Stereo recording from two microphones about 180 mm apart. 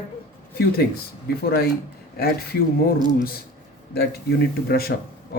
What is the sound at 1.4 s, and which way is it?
Speech, 60° left (ahead or behind).